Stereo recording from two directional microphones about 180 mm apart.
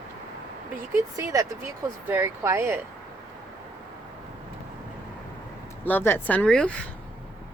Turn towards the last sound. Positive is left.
turn(degrees=5)  # may be behind; listen again after turning